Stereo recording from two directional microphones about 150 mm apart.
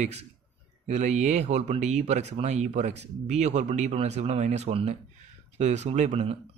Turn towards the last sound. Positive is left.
turn(degrees=-45)  # may be behind; listen again after turning